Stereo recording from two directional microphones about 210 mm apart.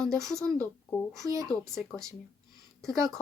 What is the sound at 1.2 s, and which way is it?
Speech, 15° right (ahead or behind).